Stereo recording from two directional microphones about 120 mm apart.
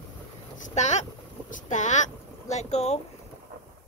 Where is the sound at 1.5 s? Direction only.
90° left; by 3.0 s 65° left (ahead or behind).